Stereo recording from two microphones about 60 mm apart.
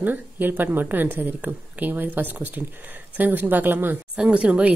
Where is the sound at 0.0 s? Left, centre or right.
Right.